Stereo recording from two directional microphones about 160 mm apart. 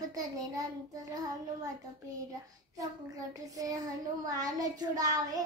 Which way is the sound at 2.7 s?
20° right (ahead or behind).